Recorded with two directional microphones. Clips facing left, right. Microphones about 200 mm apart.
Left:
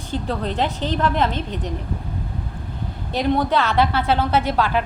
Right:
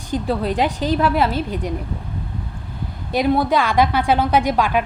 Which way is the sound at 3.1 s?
10° right (ahead or behind).